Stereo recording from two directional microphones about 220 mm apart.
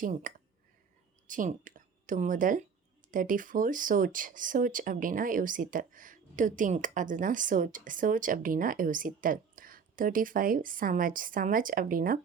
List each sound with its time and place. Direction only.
0.0 s speech: 40° right (ahead or behind)